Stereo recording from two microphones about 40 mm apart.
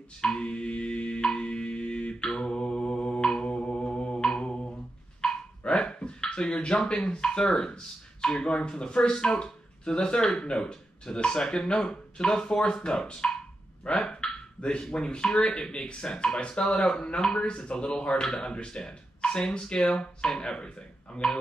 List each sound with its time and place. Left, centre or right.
0.2 s music: left
3.4 s mantra: left
5.2 s dog: left
5.6 s a sound: left
6.9 s speech: left